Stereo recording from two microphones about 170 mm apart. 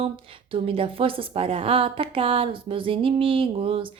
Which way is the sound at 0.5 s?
30° right (ahead or behind).